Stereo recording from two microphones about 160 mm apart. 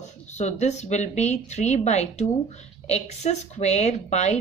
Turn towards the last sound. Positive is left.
turn(degrees=45)  # may be behind; listen again after turning